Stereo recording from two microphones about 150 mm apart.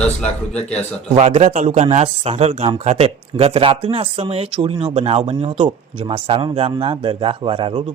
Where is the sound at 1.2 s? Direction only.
45° right (ahead or behind).